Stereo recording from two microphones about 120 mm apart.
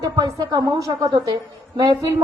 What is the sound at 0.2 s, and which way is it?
A woman's voice, 35° right (ahead or behind).